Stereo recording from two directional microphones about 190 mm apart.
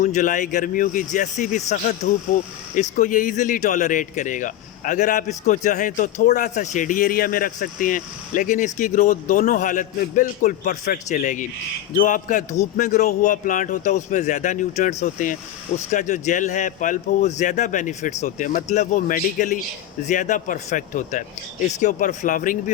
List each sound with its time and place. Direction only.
0.0 s a man's voice: 40° left (ahead or behind)